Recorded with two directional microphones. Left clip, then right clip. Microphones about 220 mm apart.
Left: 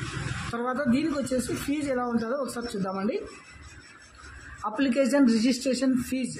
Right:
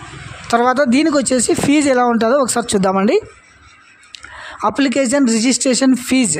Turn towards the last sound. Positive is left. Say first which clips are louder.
# right 13 dB
turn(degrees=-45)  # may be behind; listen again after turning